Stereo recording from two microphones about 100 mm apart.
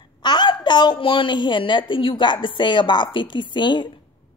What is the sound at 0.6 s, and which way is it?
A woman's voice, 45° left (ahead or behind).